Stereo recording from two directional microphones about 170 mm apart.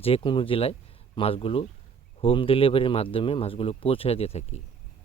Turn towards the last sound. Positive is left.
turn(degrees=40)  # may be behind; listen again after turning